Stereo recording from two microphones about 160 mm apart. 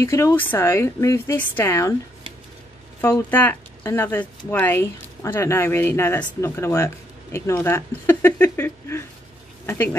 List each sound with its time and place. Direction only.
0.0 s speech: 20° left (ahead or behind)
3.0 s speech: 15° left (ahead or behind)